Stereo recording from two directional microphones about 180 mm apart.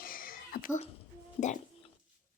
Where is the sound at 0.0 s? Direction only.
55° left (ahead or behind).